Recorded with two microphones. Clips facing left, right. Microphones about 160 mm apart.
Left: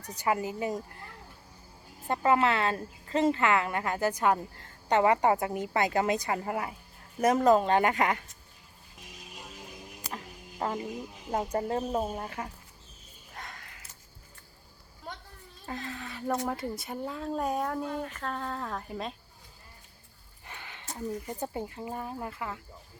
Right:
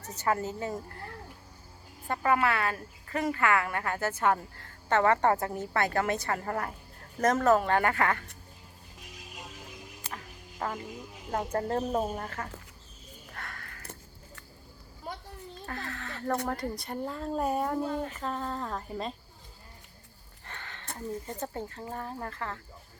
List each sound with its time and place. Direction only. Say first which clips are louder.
0.0 s a woman's voice: even; 15° left (ahead or behind)
2.0 s a woman's voice: left 2 dB; 20° left (ahead or behind)
10.6 s speech: left 2 dB; 25° left (ahead or behind)
11.5 s a woman's voice: right 2 dB; 5° left (ahead or behind)
13.3 s a sound: even; 15° left (ahead or behind)
15.6 s a sound: left 2 dB; 15° left (ahead or behind)
16.5 s speech: even; 5° left (ahead or behind)
20.4 s a sound: right 1 dB; 10° left (ahead or behind)
20.9 s a woman's voice: left 1 dB; 15° left (ahead or behind)